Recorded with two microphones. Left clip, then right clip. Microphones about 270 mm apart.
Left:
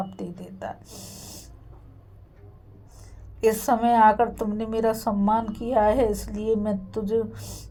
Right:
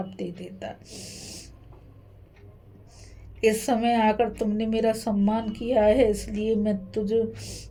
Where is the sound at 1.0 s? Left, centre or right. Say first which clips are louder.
Right 2 dB; left.